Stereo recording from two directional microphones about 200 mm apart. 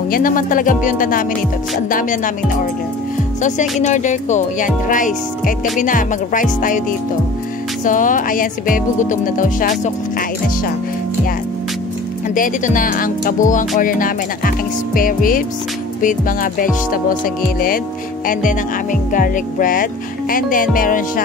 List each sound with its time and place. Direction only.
0.1 s speech: 45° left (ahead or behind)
3.8 s speech: 35° left (ahead or behind)
7.8 s speech: 40° left (ahead or behind)
12.4 s speech: 40° left (ahead or behind)
18.2 s speech: 40° left (ahead or behind)